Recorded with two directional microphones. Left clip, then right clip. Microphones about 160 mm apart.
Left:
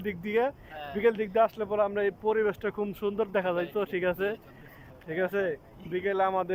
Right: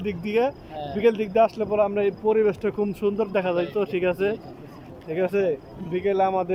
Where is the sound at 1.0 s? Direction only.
5° left (ahead or behind).